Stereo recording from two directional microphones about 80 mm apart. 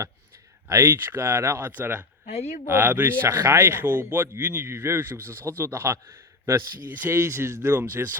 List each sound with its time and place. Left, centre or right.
0.7 s a man's voice: right